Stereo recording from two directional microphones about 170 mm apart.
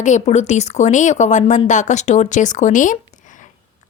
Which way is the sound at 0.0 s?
45° left (ahead or behind).